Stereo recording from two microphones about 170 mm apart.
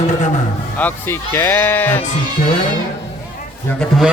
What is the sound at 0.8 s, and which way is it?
Speech, 10° left (ahead or behind).